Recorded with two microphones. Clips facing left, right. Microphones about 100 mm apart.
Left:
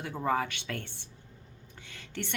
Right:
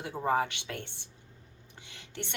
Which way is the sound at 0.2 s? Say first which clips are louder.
Right 1 dB; 25° right (ahead or behind).